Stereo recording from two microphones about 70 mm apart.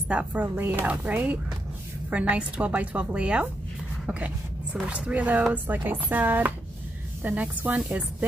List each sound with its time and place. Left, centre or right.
0.1 s a woman's voice: right
4.8 s speech: centre